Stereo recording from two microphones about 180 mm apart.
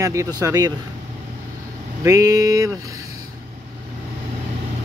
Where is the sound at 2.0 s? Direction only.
20° right (ahead or behind).